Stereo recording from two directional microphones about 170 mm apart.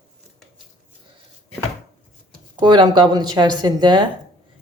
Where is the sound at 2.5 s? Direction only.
25° right (ahead or behind).